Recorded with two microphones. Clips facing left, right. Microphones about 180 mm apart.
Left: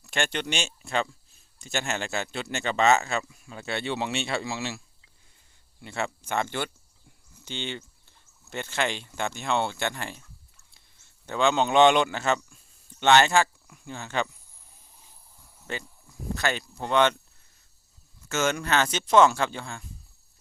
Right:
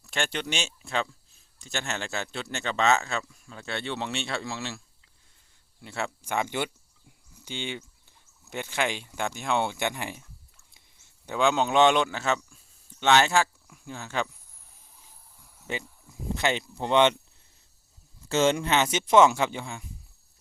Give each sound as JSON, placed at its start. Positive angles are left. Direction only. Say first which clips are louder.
{"t": 0.0, "sound": "speech", "louder": "left 2 dB", "side_deg": 0}
{"t": 5.8, "sound": "a man's voice", "louder": "left 2 dB", "side_deg": -5}
{"t": 16.0, "sound": "speech", "louder": "right 1 dB", "side_deg": -20}
{"t": 18.3, "sound": "speech", "louder": "right 3 dB", "side_deg": -30}